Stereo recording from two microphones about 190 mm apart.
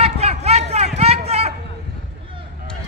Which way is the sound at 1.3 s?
35° right (ahead or behind).